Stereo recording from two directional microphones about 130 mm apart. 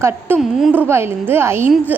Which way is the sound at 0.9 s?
20° right (ahead or behind).